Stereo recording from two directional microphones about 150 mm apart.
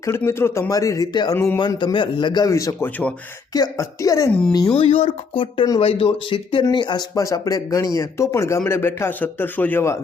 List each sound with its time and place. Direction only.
0.0 s speech: 15° left (ahead or behind)
4.8 s speech: 40° left (ahead or behind); by 10.0 s 15° left (ahead or behind)